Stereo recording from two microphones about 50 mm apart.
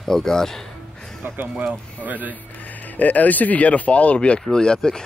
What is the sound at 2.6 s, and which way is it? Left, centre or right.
Speech, left.